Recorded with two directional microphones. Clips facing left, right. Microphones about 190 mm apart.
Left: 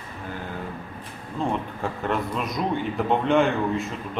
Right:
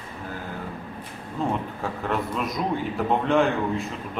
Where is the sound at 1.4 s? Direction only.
5° right (ahead or behind).